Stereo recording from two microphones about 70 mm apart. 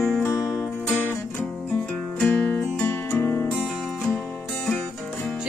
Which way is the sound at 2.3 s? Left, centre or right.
Left.